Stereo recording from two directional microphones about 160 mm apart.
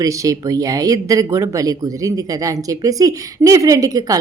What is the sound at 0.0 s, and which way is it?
Speech, 20° right (ahead or behind).